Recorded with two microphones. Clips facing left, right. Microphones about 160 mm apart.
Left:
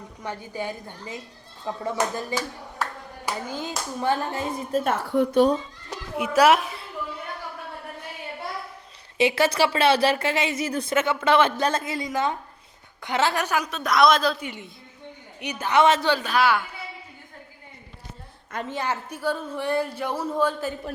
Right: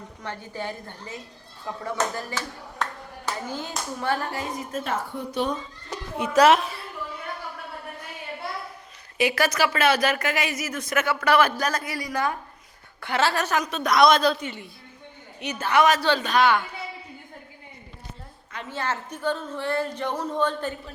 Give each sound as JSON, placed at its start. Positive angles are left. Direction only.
{"t": 0.2, "sound": "speech", "side_deg": 15}
{"t": 4.7, "sound": "a woman's voice", "side_deg": 35}
{"t": 6.1, "sound": "speech", "side_deg": 10}
{"t": 9.1, "sound": "speech", "side_deg": 25}
{"t": 13.7, "sound": "a man's voice", "side_deg": 0}
{"t": 14.4, "sound": "speech", "side_deg": 15}
{"t": 16.0, "sound": "speech", "side_deg": 10}
{"t": 18.7, "sound": "speech", "side_deg": 15}